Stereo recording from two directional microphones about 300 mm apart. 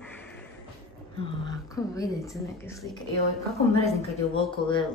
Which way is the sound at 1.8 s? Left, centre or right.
Centre.